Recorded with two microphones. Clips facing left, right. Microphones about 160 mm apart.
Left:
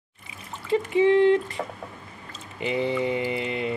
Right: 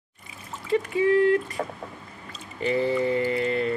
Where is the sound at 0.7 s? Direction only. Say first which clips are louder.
Left 2 dB; 25° left (ahead or behind).